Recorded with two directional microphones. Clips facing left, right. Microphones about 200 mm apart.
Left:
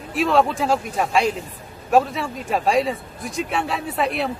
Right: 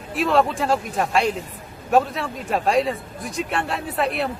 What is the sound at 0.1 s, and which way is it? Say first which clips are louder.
A man's voice: left 1 dB; centre (ahead or behind).